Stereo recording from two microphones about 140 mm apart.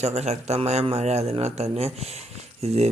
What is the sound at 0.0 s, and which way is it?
Speech, 50° right (ahead or behind).